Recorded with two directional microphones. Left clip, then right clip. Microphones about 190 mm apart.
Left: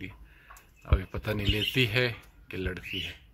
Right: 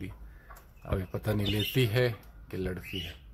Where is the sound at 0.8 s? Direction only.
5° right (ahead or behind).